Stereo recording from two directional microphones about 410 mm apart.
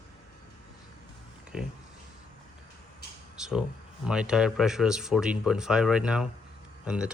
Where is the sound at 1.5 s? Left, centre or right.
Centre.